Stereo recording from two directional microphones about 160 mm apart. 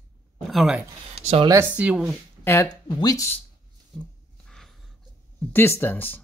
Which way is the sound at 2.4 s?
15° left (ahead or behind).